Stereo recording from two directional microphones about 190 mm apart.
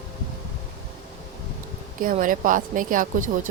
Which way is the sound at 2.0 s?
45° right (ahead or behind).